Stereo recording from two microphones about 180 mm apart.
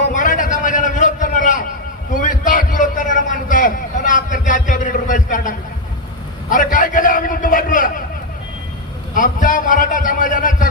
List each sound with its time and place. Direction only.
0.1 s a sound: 45° left (ahead or behind)
2.2 s a man's voice: 45° left (ahead or behind)
9.1 s a man's voice: 50° left (ahead or behind)